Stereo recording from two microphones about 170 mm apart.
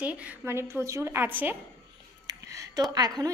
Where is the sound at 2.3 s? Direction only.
20° right (ahead or behind).